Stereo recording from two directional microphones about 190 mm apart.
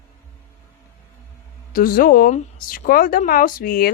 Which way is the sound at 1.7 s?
50° left (ahead or behind).